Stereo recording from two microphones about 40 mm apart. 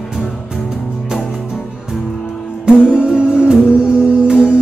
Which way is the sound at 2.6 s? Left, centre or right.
Right.